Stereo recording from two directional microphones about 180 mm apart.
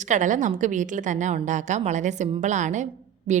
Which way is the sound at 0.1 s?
45° right (ahead or behind).